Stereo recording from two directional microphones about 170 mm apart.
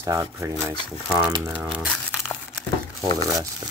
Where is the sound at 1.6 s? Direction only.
5° right (ahead or behind).